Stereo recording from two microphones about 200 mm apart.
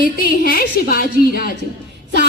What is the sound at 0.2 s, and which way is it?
Speech, 50° left (ahead or behind).